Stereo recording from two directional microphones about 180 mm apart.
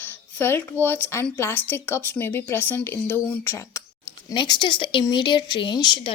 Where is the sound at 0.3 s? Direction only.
10° left (ahead or behind).